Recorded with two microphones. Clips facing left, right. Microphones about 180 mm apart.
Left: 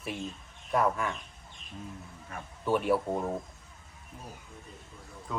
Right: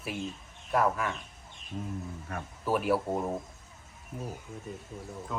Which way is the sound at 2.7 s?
Centre (ahead or behind).